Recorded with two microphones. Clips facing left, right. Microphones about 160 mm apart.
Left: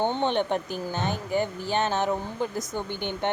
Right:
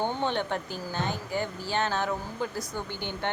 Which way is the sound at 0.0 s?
20° left (ahead or behind).